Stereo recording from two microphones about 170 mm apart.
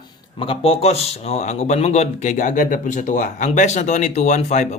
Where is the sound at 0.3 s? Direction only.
30° left (ahead or behind).